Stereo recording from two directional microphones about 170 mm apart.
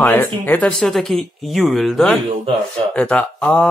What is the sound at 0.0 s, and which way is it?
Speech, 10° left (ahead or behind).